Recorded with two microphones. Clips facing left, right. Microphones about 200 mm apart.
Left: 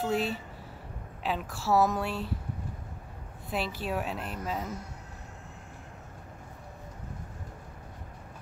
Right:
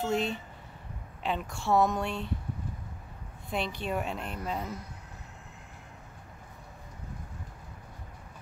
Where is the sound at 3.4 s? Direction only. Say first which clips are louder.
Even; 5° left (ahead or behind).